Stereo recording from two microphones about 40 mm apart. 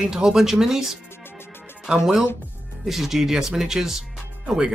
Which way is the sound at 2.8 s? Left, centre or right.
Centre.